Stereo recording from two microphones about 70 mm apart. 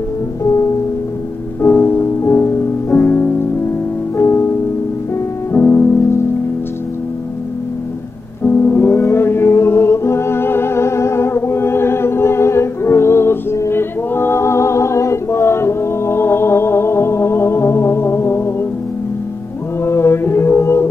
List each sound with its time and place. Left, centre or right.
1.6 s music: left
5.5 s music: left
8.5 s music: left
19.8 s music: left